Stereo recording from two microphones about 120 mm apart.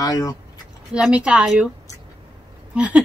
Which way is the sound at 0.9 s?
10° right (ahead or behind).